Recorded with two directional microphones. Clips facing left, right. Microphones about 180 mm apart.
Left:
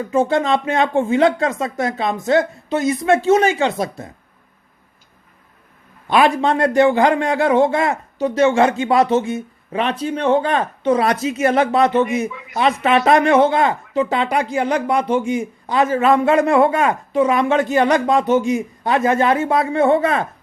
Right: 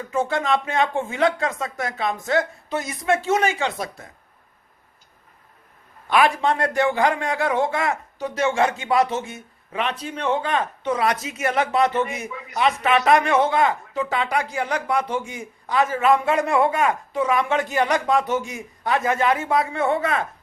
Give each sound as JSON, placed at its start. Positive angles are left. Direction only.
{"t": 0.1, "sound": "speech", "side_deg": 25}
{"t": 6.1, "sound": "speech", "side_deg": 25}
{"t": 12.3, "sound": "speech", "side_deg": -40}
{"t": 12.5, "sound": "speech", "side_deg": 30}